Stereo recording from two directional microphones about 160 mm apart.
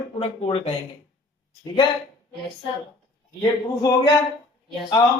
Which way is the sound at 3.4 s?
20° left (ahead or behind).